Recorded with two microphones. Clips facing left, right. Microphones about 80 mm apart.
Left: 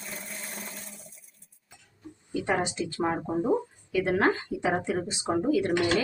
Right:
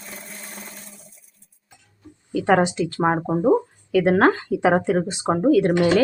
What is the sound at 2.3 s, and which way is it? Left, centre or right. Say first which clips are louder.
Speech: right 10 dB; right.